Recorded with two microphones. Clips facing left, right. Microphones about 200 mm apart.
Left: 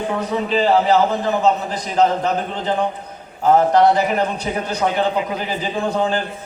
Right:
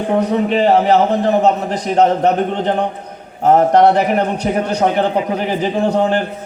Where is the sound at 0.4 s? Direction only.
60° right (ahead or behind).